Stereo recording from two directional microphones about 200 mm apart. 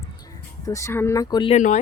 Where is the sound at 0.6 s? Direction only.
15° left (ahead or behind).